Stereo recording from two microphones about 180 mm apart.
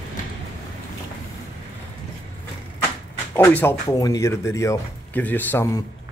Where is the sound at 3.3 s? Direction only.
10° left (ahead or behind).